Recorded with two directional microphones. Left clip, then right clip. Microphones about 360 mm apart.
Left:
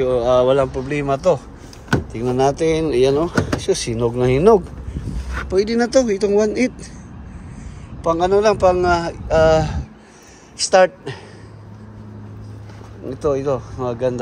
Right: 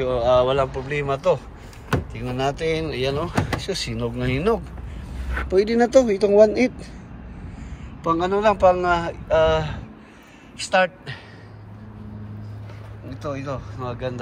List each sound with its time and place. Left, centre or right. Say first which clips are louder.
0.0 s speech: left 3 dB; centre
8.1 s speech: left 4 dB; centre
13.1 s speech: left 11 dB; left